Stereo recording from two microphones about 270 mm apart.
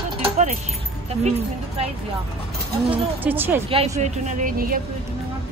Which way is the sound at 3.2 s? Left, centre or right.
Centre.